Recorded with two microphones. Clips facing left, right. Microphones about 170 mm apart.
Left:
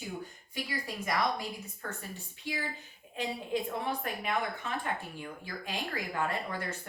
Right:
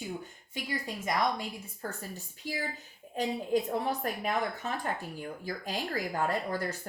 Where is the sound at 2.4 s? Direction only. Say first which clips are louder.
Right 1 dB; 40° right (ahead or behind).